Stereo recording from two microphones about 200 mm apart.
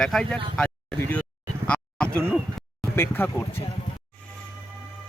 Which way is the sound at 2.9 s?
10° left (ahead or behind).